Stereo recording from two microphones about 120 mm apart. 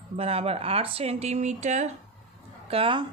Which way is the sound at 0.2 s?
55° right (ahead or behind).